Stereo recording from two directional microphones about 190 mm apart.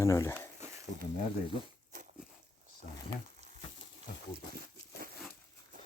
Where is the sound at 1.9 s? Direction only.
45° right (ahead or behind).